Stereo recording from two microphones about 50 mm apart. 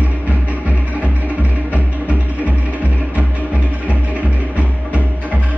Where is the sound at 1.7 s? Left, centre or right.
Right.